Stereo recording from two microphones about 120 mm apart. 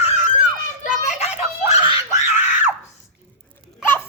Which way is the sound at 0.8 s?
65° left (ahead or behind).